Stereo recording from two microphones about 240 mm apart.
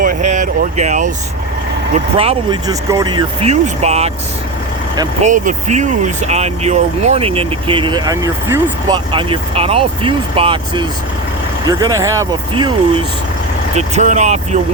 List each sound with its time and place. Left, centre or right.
0.0 s vehicle: right
2.1 s speech: right
5.2 s speech: right; by 12.7 s centre
13.7 s speech: right